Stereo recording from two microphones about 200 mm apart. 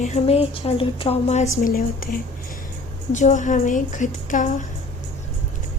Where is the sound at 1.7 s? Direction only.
45° left (ahead or behind).